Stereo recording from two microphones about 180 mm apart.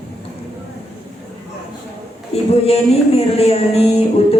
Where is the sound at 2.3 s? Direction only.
35° left (ahead or behind).